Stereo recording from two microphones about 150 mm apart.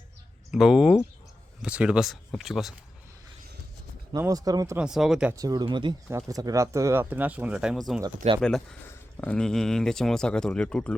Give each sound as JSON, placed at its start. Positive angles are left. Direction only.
{"t": 0.5, "sound": "speech", "side_deg": -5}
{"t": 4.1, "sound": "speech", "side_deg": -25}
{"t": 4.8, "sound": "speech", "side_deg": -5}
{"t": 5.3, "sound": "speech", "side_deg": -25}
{"t": 6.1, "sound": "speech", "side_deg": -20}